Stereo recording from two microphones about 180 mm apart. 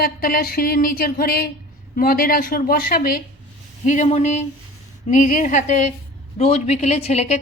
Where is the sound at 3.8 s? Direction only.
40° left (ahead or behind).